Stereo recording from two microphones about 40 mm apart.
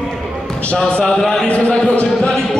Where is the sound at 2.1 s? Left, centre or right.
Centre.